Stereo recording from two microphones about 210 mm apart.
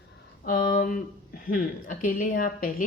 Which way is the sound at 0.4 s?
40° left (ahead or behind).